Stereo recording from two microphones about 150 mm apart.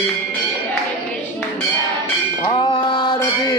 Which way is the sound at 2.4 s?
30° left (ahead or behind).